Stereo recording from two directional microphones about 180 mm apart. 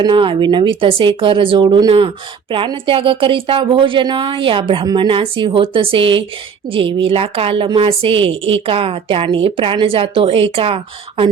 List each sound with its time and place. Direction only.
0.0 s a woman's voice: 25° right (ahead or behind)